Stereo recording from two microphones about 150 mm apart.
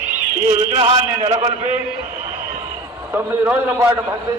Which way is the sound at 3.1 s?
15° right (ahead or behind).